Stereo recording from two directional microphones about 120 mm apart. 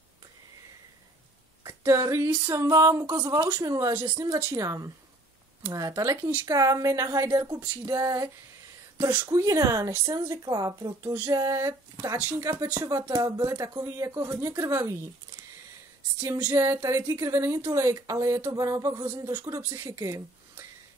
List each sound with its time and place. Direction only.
1.6 s a woman's voice: 25° right (ahead or behind)
3.9 s a woman's voice: 15° right (ahead or behind)
13.2 s a woman's voice: 30° right (ahead or behind)
16.5 s a woman's voice: 25° right (ahead or behind)